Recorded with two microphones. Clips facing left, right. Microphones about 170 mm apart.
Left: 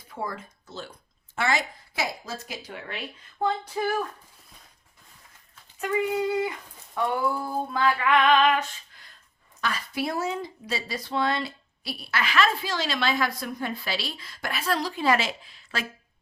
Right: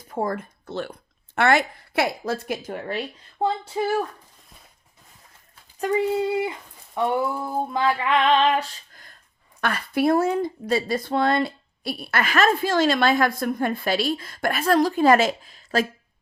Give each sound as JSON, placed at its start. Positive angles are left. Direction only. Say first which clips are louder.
{"t": 0.1, "sound": "speech", "louder": "right 8 dB", "side_deg": -50}
{"t": 5.8, "sound": "female singing", "louder": "right 4 dB", "side_deg": -25}
{"t": 9.6, "sound": "speech", "louder": "right 6 dB", "side_deg": -60}